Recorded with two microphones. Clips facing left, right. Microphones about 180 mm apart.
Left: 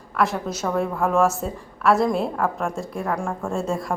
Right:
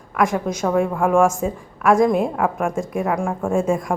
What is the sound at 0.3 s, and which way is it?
Speech, 10° right (ahead or behind).